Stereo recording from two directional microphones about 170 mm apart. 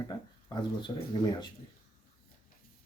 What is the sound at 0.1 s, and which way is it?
Speech, 25° left (ahead or behind).